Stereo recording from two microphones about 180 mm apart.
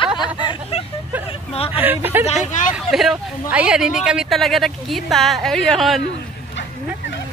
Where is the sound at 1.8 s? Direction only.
10° right (ahead or behind).